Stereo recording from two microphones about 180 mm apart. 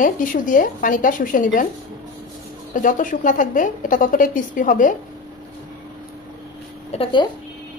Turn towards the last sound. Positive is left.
turn(degrees=30)  # may be behind; listen again after turning